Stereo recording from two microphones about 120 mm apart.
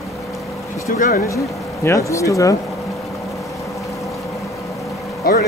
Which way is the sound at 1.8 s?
25° left (ahead or behind).